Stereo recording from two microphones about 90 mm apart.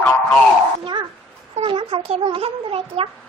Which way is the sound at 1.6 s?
80° right.